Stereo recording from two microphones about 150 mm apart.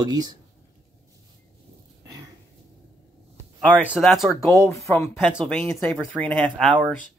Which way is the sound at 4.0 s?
Centre (ahead or behind).